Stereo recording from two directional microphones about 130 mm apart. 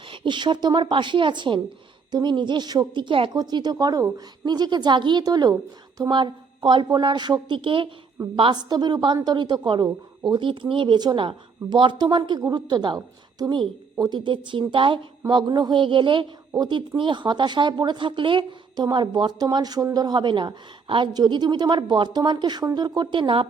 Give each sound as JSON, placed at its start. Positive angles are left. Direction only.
{"t": 0.1, "sound": "speech", "side_deg": -40}
{"t": 14.0, "sound": "speech", "side_deg": -35}